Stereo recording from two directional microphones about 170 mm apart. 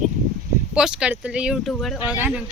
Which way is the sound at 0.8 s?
5° right (ahead or behind).